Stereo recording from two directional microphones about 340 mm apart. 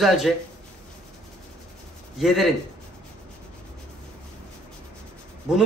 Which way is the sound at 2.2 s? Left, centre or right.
Centre.